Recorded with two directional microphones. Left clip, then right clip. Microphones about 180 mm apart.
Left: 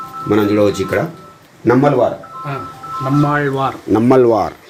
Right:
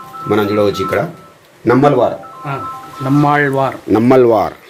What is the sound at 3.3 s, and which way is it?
Speech, 55° right (ahead or behind).